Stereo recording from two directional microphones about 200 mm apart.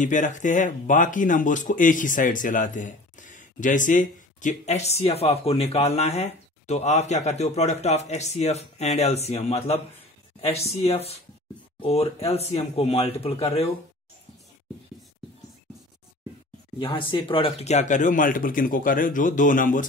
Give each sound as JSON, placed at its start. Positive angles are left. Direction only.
{"t": 0.0, "sound": "speech", "side_deg": 40}
{"t": 16.7, "sound": "speech", "side_deg": 25}